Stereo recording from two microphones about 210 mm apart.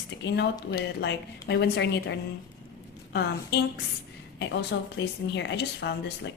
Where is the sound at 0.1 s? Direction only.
55° left (ahead or behind).